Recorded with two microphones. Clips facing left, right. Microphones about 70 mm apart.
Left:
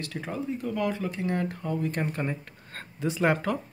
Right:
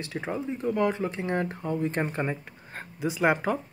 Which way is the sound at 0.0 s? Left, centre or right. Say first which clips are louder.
Right 2 dB; right.